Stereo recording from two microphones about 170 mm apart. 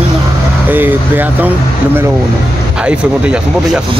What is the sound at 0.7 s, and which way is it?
Speech, 10° right (ahead or behind).